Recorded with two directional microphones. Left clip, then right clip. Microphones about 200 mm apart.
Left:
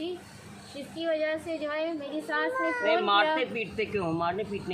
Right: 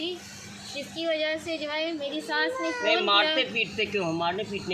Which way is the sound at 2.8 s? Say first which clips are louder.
Right 2 dB; 35° right (ahead or behind).